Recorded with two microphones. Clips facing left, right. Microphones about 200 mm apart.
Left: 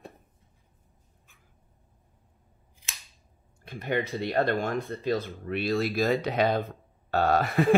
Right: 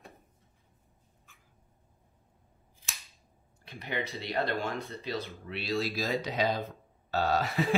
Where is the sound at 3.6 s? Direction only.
50° left (ahead or behind).